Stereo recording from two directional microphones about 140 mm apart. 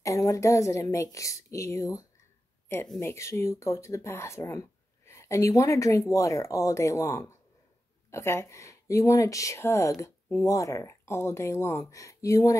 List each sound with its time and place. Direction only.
0.0 s speech: 25° left (ahead or behind)